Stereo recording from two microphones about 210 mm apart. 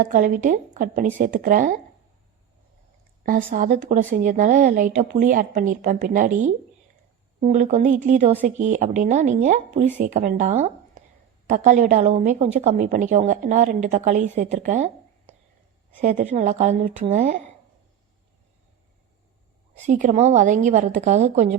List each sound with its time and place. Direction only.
0.0 s speech: 40° right (ahead or behind)
3.2 s speech: 40° right (ahead or behind)
16.0 s speech: 35° right (ahead or behind)
19.7 s speech: 35° right (ahead or behind)